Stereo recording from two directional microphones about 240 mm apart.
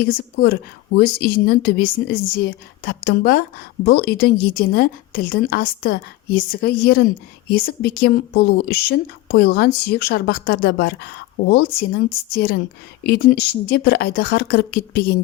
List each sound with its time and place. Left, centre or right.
0.0 s a woman's voice: left